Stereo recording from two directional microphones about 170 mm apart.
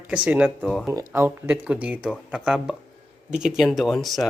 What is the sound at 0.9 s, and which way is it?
Speech, 15° right (ahead or behind).